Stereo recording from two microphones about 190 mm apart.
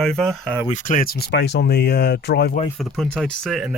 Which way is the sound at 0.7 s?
45° left (ahead or behind).